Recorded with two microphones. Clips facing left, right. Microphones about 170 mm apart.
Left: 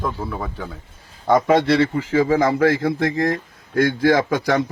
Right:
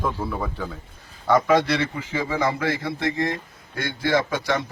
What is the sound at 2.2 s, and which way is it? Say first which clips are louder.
Speech: left 6 dB; 45° left (ahead or behind).